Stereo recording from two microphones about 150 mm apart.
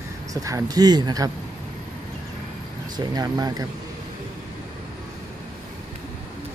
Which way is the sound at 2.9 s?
25° right (ahead or behind).